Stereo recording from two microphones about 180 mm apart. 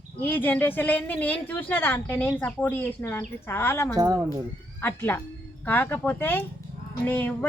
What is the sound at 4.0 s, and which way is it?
Speech, 20° right (ahead or behind).